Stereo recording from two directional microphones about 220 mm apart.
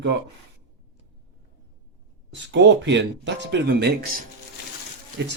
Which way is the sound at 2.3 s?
55° right (ahead or behind).